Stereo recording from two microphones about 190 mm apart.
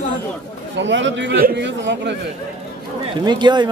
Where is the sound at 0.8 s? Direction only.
70° right (ahead or behind).